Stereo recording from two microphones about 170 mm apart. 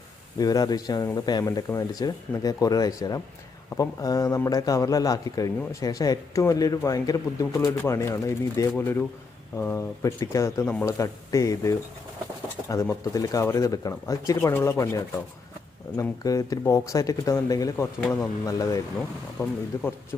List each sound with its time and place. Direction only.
0.3 s a man's voice: 20° left (ahead or behind)